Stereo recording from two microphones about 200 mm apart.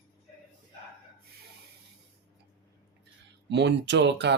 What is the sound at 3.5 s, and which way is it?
Speech, 60° right (ahead or behind).